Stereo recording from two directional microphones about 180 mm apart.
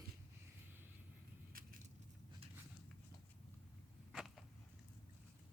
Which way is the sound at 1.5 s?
50° right (ahead or behind).